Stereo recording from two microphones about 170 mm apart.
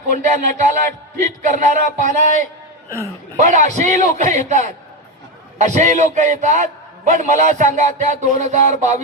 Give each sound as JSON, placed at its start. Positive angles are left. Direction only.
{"t": 0.1, "sound": "a man's voice", "side_deg": -50}
{"t": 3.3, "sound": "a man's voice", "side_deg": -45}